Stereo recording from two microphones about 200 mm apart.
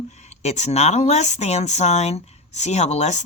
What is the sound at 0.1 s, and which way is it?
Speech, 35° left (ahead or behind).